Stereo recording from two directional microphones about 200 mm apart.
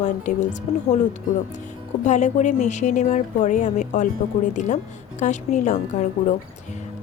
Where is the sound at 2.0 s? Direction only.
35° left (ahead or behind).